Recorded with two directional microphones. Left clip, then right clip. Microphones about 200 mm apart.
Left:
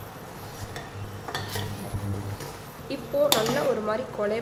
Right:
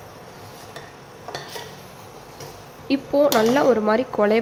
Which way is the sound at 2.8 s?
45° right (ahead or behind).